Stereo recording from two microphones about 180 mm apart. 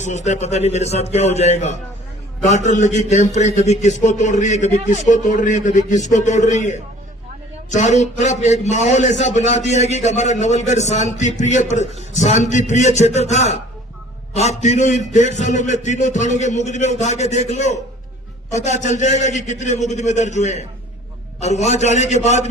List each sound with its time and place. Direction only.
0.0 s a man's voice: 40° left (ahead or behind)